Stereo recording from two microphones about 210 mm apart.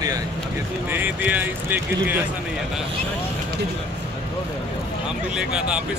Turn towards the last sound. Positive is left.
turn(degrees=-5)  # may be behind; listen again after turning